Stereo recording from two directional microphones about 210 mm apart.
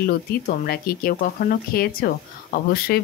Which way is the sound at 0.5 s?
45° left (ahead or behind).